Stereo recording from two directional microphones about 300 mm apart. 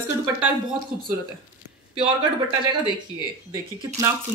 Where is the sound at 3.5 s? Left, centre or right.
Centre.